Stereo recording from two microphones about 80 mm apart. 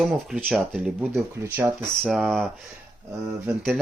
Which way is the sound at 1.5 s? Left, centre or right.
Right.